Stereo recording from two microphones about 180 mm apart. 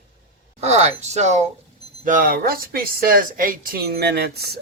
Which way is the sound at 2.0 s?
50° right (ahead or behind).